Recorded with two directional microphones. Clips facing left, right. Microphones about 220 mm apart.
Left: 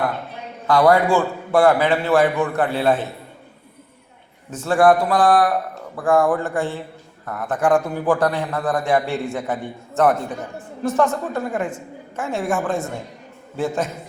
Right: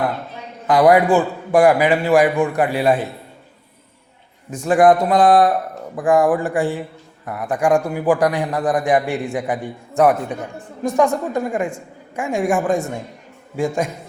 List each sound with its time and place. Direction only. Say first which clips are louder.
0.7 s a man's voice: right 2 dB; 20° right (ahead or behind)
4.5 s a man's voice: right 2 dB; 15° right (ahead or behind)